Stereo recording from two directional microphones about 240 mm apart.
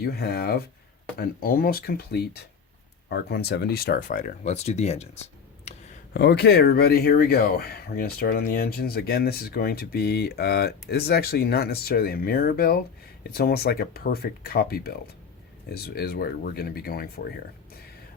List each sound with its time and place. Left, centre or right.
0.0 s speech: left
6.1 s speech: left